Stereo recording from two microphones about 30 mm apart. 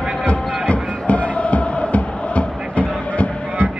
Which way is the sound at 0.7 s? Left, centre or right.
Left.